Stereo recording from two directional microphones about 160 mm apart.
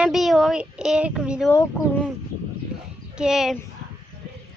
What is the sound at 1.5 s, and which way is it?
Speech, 20° left (ahead or behind).